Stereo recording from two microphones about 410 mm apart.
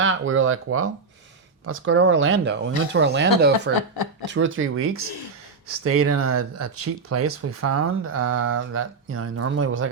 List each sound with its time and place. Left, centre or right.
0.0 s speech: right
3.8 s speech: left
4.3 s speech: right